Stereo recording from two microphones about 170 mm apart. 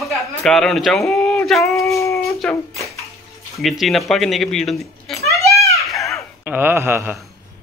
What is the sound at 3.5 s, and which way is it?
A man's voice, centre (ahead or behind).